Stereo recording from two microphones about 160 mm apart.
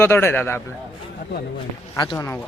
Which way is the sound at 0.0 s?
15° left (ahead or behind).